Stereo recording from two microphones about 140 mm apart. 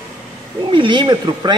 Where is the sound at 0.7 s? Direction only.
35° right (ahead or behind).